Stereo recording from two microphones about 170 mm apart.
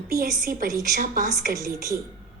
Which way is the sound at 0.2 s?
55° right (ahead or behind).